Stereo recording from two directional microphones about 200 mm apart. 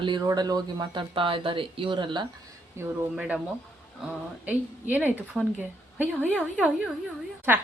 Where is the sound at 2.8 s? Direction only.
15° right (ahead or behind).